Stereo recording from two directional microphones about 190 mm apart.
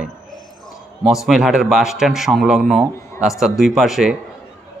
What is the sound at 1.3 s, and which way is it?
A man's voice, centre (ahead or behind).